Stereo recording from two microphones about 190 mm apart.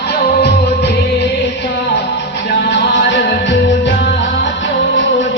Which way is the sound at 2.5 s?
60° left (ahead or behind).